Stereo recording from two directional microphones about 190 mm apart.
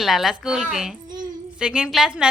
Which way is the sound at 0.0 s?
Centre (ahead or behind).